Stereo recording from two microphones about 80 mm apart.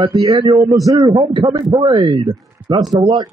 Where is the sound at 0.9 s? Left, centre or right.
Right.